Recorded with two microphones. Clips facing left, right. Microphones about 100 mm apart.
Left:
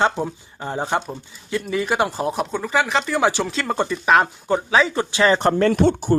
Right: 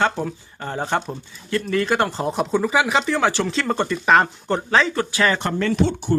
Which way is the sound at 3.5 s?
Centre (ahead or behind).